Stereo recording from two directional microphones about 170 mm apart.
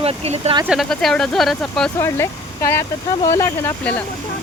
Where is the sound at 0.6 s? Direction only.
Centre (ahead or behind).